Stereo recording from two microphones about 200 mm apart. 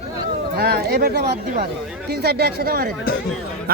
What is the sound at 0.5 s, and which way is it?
A man's voice, 50° right (ahead or behind).